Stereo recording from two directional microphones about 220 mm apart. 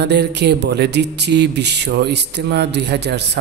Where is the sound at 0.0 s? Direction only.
50° right (ahead or behind).